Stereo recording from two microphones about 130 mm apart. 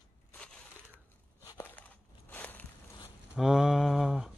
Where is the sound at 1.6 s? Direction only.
15° left (ahead or behind).